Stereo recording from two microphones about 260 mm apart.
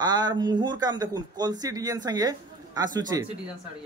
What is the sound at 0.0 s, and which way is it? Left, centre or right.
Speech, centre.